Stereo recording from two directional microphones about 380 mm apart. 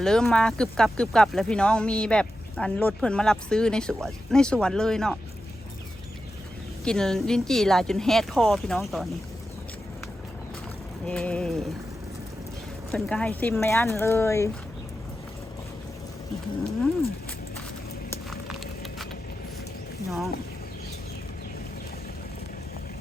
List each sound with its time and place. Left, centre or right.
0.0 s speech: centre
6.8 s speech: centre
11.0 s speech: centre
12.9 s speech: centre
18.1 s a sound: centre
20.1 s speech: centre